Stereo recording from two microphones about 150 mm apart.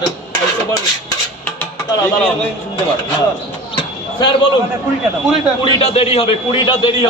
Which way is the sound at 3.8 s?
35° left (ahead or behind).